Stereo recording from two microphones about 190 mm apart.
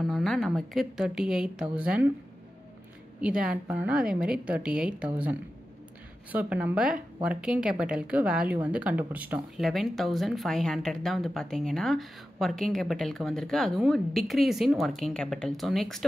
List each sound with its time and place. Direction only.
0.0 s a woman's voice: centre (ahead or behind)
3.2 s a woman's voice: 5° right (ahead or behind)